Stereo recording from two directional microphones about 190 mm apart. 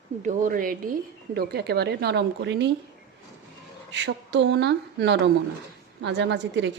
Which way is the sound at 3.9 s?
65° right (ahead or behind).